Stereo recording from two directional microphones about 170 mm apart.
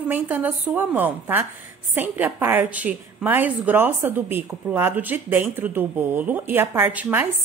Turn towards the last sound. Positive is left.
turn(degrees=-10)  # may be behind; listen again after turning